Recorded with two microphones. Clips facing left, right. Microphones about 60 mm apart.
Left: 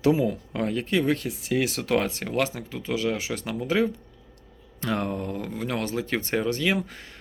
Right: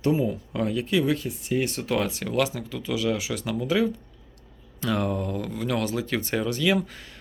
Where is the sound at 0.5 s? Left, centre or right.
Left.